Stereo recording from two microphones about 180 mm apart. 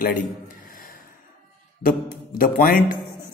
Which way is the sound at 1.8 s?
50° left (ahead or behind).